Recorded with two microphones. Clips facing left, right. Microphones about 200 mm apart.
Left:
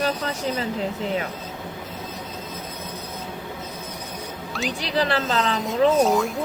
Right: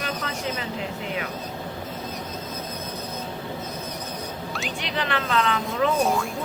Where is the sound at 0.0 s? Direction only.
40° left (ahead or behind).